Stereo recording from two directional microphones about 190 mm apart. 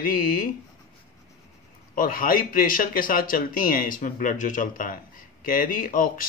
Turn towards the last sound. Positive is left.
turn(degrees=50)  # may be behind; listen again after turning